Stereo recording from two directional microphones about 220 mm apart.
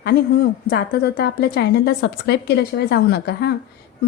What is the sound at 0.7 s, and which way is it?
A woman's voice, 50° left (ahead or behind).